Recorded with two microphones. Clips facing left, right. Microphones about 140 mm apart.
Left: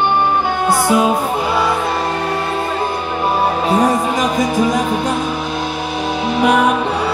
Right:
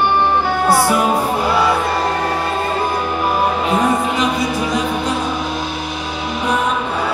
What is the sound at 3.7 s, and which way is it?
Music, 35° left (ahead or behind).